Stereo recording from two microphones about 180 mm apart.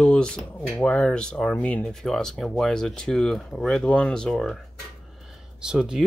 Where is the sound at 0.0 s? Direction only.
5° left (ahead or behind).